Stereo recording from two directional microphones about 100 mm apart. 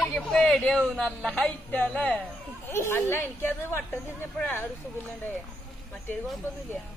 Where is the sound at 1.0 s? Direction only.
10° left (ahead or behind).